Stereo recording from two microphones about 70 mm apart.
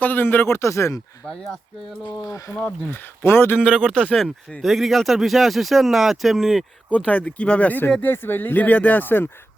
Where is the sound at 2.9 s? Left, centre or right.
Left.